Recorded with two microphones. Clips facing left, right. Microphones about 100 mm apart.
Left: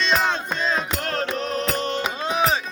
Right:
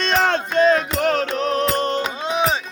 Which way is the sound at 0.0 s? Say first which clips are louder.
Right 3 dB; 60° right (ahead or behind).